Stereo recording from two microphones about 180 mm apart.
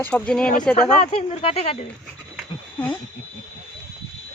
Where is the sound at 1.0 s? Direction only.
35° left (ahead or behind).